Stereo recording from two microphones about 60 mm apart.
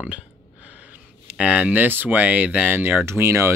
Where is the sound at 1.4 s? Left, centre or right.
Right.